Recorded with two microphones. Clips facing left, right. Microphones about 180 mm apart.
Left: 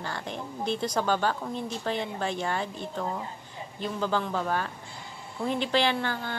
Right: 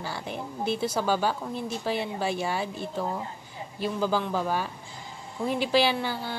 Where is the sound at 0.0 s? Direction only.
5° right (ahead or behind).